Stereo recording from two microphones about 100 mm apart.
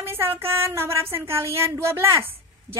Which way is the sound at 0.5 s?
25° right (ahead or behind).